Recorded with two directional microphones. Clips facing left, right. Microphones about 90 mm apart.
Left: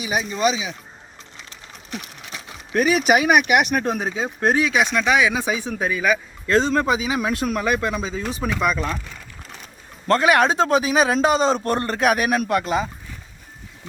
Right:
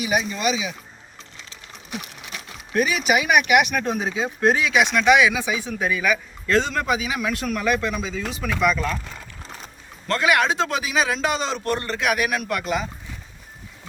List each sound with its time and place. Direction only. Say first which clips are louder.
0.0 s speech: left 1 dB; 25° left (ahead or behind)
2.7 s a man's voice: left 3 dB; 45° left (ahead or behind)
4.9 s a man's voice: right 4 dB; 30° left (ahead or behind)
10.1 s a man's voice: left 4 dB; 35° left (ahead or behind)